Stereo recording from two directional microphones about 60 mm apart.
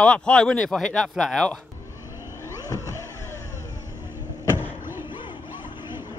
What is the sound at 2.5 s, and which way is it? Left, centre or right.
Vehicle, left.